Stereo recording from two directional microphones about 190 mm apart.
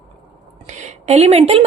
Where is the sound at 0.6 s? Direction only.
40° right (ahead or behind).